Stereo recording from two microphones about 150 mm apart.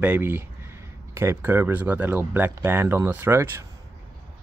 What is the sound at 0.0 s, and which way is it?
Speech, 10° right (ahead or behind).